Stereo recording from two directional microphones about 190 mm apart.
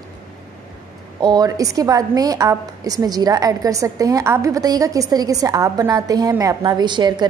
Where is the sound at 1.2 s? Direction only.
20° right (ahead or behind).